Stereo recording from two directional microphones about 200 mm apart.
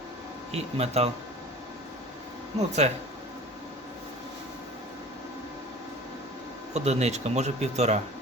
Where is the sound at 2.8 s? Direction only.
35° right (ahead or behind).